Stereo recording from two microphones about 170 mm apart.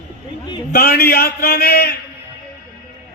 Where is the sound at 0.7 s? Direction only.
60° left (ahead or behind).